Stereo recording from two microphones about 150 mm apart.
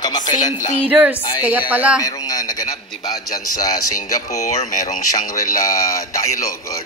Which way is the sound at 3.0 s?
25° left (ahead or behind).